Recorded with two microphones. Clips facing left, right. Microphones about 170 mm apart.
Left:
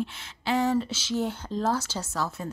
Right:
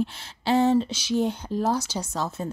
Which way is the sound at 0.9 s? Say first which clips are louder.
Right 4 dB; 15° right (ahead or behind).